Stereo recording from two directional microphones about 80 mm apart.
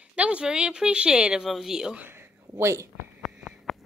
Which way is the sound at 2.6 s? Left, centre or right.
Right.